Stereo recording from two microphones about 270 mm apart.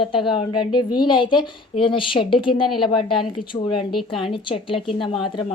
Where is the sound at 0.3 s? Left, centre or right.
Centre.